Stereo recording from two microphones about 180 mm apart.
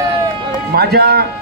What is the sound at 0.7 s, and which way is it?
Speech, 60° right (ahead or behind).